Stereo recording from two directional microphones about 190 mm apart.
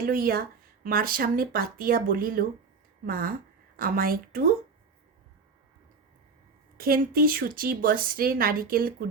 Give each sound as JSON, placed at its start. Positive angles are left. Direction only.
{"t": 0.0, "sound": "a woman's voice", "side_deg": -50}
{"t": 6.7, "sound": "a woman's voice", "side_deg": -50}